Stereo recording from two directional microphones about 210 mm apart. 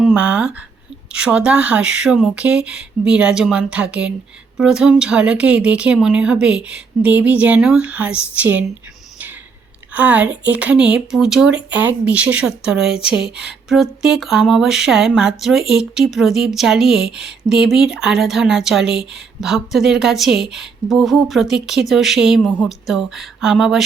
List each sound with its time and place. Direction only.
0.0 s speech: 5° right (ahead or behind)
9.9 s speech: 5° right (ahead or behind)